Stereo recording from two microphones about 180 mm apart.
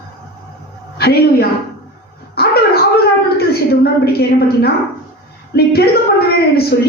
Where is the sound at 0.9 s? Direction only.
60° left (ahead or behind).